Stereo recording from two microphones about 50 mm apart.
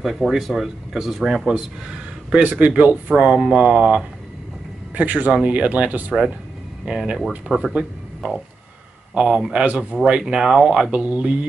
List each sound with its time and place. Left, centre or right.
0.0 s speech: centre
2.3 s speech: right
4.9 s speech: right
6.9 s speech: centre
10.9 s speech: right